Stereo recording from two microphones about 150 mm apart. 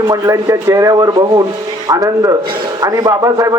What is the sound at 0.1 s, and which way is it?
A man's voice, 20° right (ahead or behind).